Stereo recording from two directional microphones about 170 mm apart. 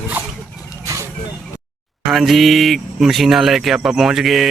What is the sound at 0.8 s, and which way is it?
Vehicle, 15° right (ahead or behind).